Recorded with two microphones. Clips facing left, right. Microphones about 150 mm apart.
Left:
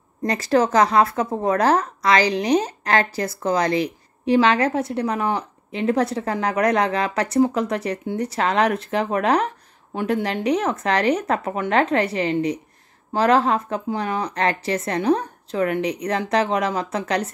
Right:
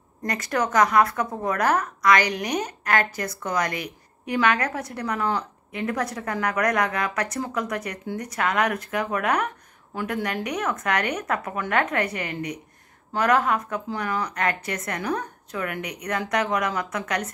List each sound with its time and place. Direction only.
0.2 s a woman's voice: 30° left (ahead or behind)